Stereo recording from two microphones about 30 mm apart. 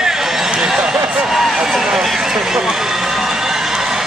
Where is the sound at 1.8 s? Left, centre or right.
Centre.